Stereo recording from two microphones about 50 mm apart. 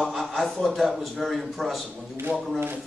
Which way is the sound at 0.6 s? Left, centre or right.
Centre.